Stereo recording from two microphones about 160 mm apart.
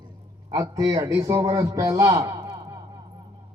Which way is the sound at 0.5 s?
20° right (ahead or behind).